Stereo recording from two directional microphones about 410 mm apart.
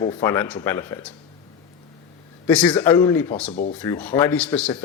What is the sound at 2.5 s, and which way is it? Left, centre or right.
A man's voice, centre.